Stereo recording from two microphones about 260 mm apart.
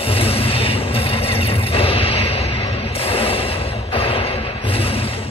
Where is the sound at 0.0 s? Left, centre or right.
Left.